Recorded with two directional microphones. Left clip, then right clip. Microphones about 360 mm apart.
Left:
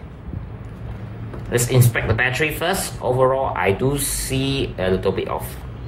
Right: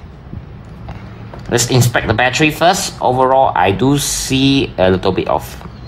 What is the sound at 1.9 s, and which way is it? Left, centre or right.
Speech, right.